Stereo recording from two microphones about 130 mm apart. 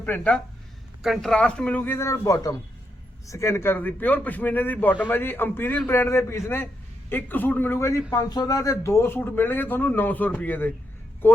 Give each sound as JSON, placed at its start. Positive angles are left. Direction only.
{"t": 0.0, "sound": "speech", "side_deg": 10}
{"t": 1.0, "sound": "speech", "side_deg": 0}